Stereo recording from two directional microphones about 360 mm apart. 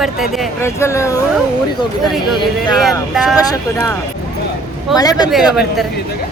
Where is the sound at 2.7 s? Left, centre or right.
Centre.